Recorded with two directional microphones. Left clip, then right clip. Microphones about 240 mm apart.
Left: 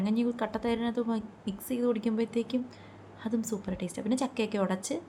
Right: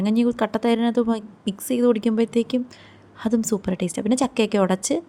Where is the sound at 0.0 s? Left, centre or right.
Right.